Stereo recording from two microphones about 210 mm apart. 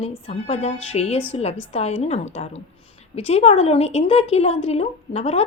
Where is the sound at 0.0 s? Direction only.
30° left (ahead or behind).